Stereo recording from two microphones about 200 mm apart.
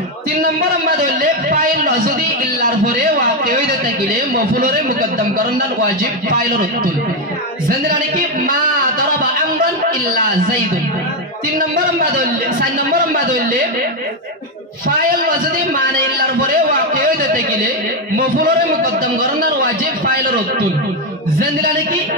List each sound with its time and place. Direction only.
0.7 s a sound: 45° right (ahead or behind)
5.9 s a man's voice: 45° right (ahead or behind)
8.2 s music: 45° right (ahead or behind)
11.7 s a man's voice: 45° right (ahead or behind)
14.9 s a man's voice: 45° right (ahead or behind)